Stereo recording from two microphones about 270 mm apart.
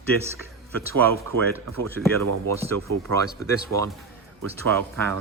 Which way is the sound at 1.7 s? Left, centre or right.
Centre.